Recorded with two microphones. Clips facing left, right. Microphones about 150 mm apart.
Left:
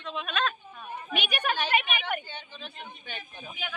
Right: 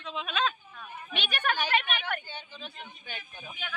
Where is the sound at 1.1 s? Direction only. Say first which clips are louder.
Left 1 dB; 10° left (ahead or behind).